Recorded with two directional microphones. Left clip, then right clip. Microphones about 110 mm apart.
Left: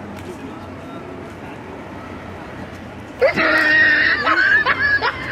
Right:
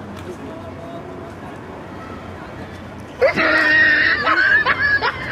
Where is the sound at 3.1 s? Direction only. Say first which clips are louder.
Even; centre (ahead or behind).